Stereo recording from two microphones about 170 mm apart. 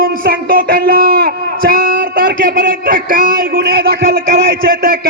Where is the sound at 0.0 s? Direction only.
55° right (ahead or behind).